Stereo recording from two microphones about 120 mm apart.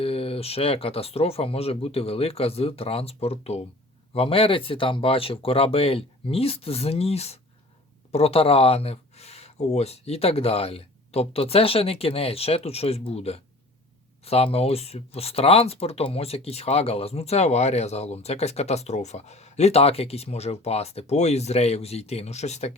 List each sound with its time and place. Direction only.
0.0 s speech: 55° left (ahead or behind)